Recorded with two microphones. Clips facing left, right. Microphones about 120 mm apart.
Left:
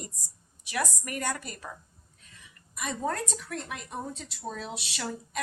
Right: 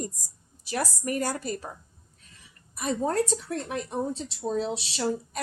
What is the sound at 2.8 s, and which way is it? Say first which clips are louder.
A woman's voice: right 6 dB; 35° right (ahead or behind).